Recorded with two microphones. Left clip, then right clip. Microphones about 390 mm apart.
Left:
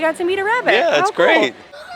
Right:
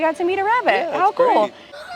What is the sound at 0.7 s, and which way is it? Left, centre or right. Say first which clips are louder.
Speech: left 3 dB; left.